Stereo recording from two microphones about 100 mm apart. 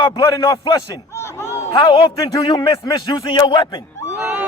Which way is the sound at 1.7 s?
60° left (ahead or behind).